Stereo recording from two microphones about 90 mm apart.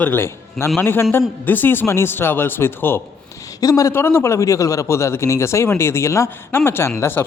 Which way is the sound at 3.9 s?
25° left (ahead or behind).